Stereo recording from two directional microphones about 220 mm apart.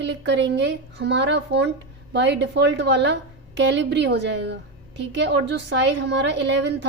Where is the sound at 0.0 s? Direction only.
55° right (ahead or behind).